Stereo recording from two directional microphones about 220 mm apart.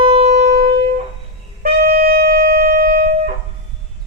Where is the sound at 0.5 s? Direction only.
45° right (ahead or behind).